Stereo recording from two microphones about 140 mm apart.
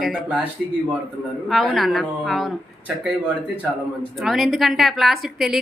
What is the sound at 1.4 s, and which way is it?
A woman's voice, centre (ahead or behind).